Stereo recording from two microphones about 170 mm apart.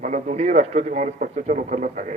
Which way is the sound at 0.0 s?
45° right (ahead or behind).